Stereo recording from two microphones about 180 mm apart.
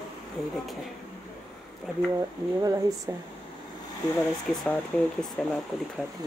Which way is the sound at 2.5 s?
20° right (ahead or behind).